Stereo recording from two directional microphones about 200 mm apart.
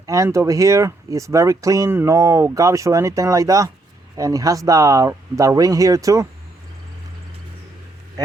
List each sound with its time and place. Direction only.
0.0 s speech: 15° right (ahead or behind)